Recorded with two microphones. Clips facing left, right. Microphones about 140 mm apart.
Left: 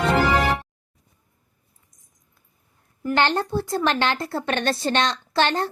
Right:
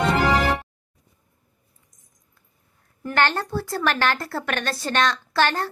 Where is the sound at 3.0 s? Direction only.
15° left (ahead or behind).